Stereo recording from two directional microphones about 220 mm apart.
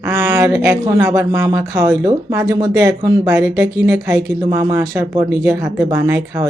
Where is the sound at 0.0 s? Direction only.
10° right (ahead or behind).